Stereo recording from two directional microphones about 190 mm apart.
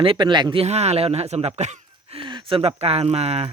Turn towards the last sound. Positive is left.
turn(degrees=-35)  # may be behind; listen again after turning